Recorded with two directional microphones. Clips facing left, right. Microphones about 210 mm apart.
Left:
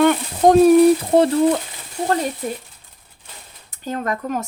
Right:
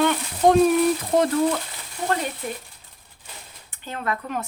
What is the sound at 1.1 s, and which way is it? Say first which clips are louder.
Speech: left 5 dB; 30° left (ahead or behind).